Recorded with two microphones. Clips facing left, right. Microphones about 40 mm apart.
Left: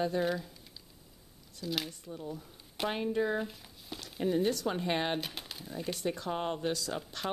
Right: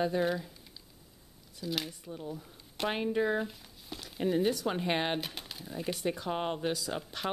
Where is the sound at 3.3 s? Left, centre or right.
Centre.